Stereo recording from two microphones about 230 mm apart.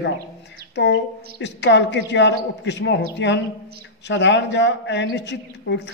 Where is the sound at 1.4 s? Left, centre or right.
Left.